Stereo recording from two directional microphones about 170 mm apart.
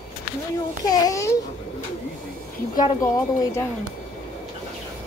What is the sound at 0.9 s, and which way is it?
Speech, 20° left (ahead or behind).